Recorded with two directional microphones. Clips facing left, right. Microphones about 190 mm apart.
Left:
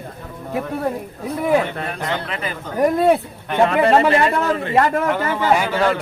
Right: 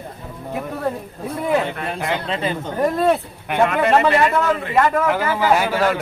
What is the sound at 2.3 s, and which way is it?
Speech, 25° right (ahead or behind).